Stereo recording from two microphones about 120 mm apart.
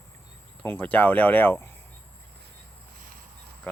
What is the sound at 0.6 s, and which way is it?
Speech, 15° left (ahead or behind).